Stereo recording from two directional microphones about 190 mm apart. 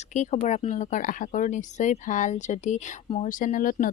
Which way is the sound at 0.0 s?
35° left (ahead or behind).